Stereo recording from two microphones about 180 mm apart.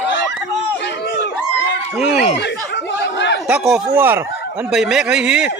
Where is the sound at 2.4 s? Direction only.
75° left (ahead or behind).